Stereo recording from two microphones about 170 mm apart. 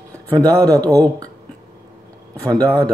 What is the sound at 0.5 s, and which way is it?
Speech, 20° right (ahead or behind).